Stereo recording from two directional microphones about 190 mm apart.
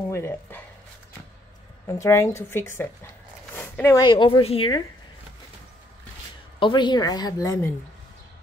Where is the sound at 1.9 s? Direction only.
15° left (ahead or behind).